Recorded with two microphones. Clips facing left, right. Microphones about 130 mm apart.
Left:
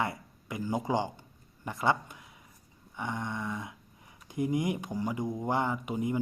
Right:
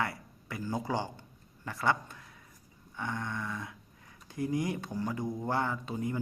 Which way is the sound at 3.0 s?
15° left (ahead or behind).